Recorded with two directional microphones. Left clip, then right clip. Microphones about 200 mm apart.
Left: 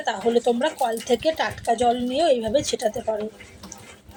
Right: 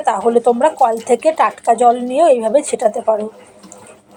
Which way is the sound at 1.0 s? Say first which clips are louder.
Right 8 dB; 30° right (ahead or behind).